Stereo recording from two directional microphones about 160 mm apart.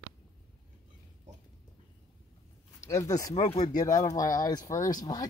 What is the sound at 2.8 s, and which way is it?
Speech, 20° left (ahead or behind).